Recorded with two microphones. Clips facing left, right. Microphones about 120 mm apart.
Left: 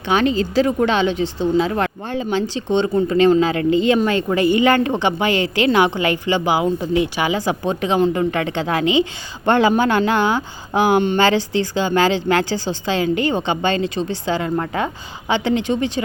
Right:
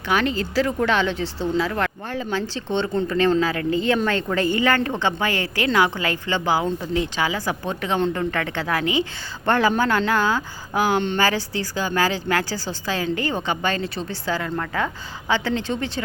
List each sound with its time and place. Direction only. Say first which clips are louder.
0.1 s a woman's voice: left 5 dB; 20° left (ahead or behind)
7.9 s a woman's voice: left 5 dB; 10° left (ahead or behind)
8.2 s a woman's voice: left 5 dB; 20° left (ahead or behind)